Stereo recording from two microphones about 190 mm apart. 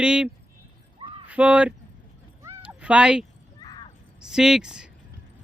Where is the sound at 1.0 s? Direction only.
25° right (ahead or behind).